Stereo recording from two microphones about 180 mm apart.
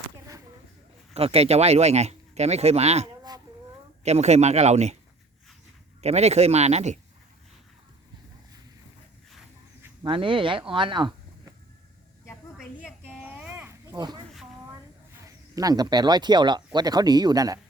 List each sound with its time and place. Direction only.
1.1 s speech: 35° right (ahead or behind)
6.0 s speech: 35° right (ahead or behind)
10.0 s speech: 30° right (ahead or behind)
10.7 s a sound: 25° right (ahead or behind)
13.1 s a sound: 10° right (ahead or behind)
13.9 s speech: 20° right (ahead or behind)